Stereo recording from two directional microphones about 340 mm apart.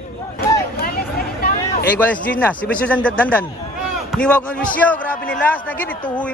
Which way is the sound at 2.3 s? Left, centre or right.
Centre.